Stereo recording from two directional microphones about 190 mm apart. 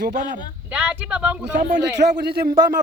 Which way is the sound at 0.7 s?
5° right (ahead or behind).